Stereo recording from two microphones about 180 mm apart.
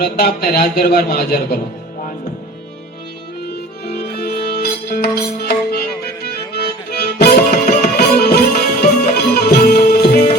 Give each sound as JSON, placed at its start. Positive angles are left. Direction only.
{"t": 0.0, "sound": "a man's voice", "side_deg": 60}
{"t": 3.5, "sound": "music", "side_deg": 60}